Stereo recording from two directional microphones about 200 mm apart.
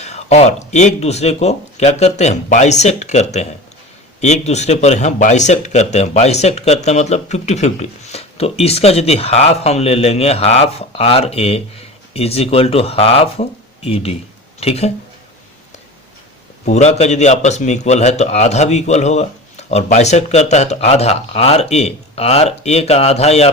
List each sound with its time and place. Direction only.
0.0 s speech: 35° left (ahead or behind)
16.6 s speech: 35° left (ahead or behind)